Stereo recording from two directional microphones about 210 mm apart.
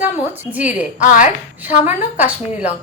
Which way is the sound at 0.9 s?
40° left (ahead or behind).